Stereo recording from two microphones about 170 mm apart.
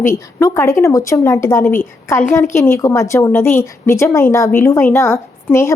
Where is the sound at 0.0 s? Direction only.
15° left (ahead or behind).